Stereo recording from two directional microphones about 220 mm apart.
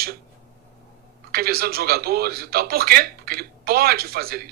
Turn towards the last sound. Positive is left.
turn(degrees=-45)  # may be behind; listen again after turning